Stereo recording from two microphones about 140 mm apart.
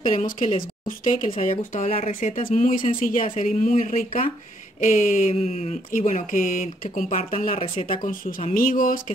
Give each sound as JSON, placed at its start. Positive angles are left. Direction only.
{"t": 0.0, "sound": "speech", "side_deg": 70}
{"t": 1.8, "sound": "speech", "side_deg": 55}
{"t": 2.4, "sound": "speech", "side_deg": 70}
{"t": 2.9, "sound": "speech", "side_deg": 85}
{"t": 3.3, "sound": "speech", "side_deg": 60}
{"t": 5.9, "sound": "speech", "side_deg": 65}
{"t": 8.5, "sound": "speech", "side_deg": 80}